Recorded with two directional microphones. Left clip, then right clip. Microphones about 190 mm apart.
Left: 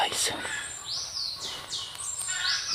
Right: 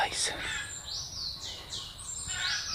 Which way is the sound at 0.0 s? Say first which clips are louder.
Left 3 dB; 30° left (ahead or behind).